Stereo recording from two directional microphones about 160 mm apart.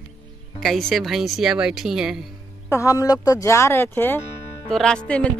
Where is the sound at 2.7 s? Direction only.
20° left (ahead or behind).